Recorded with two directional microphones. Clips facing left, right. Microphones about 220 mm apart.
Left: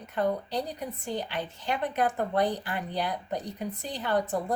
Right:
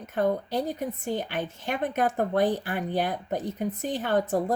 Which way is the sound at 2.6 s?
65° right (ahead or behind).